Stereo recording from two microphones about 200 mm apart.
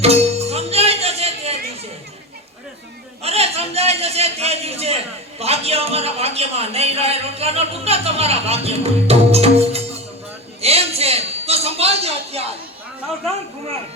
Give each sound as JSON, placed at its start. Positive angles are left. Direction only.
{"t": 0.0, "sound": "music", "side_deg": -30}
{"t": 3.2, "sound": "a man's voice", "side_deg": -30}
{"t": 10.6, "sound": "a sound", "side_deg": -30}